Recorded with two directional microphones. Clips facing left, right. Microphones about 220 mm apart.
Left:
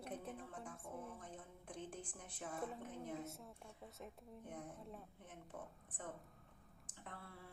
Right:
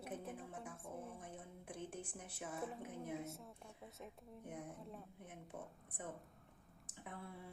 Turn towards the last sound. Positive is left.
turn(degrees=-15)  # may be behind; listen again after turning